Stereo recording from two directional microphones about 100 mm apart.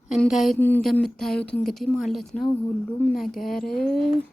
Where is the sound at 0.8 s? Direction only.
5° left (ahead or behind).